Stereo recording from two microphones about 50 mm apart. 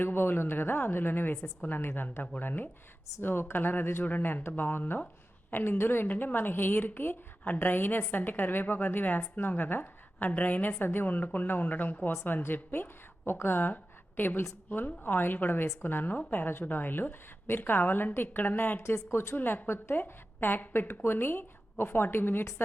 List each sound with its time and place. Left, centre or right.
0.0 s a woman's voice: left
3.2 s a woman's voice: left
19.1 s a woman's voice: left
19.4 s a woman's voice: left
19.7 s a woman's voice: left